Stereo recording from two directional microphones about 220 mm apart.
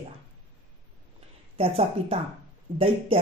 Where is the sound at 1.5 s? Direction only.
25° right (ahead or behind).